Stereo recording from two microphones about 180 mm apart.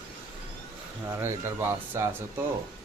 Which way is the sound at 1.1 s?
15° right (ahead or behind).